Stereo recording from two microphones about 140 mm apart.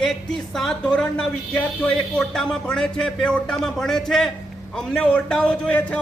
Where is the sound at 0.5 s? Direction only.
5° left (ahead or behind).